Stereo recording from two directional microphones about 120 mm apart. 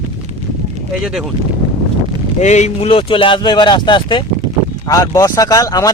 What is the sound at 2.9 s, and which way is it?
Speech, 50° left (ahead or behind).